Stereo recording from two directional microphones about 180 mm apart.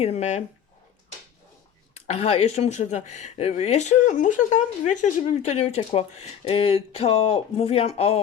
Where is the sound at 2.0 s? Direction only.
35° left (ahead or behind).